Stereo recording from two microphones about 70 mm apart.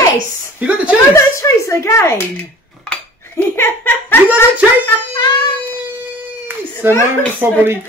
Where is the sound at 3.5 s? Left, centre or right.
Left.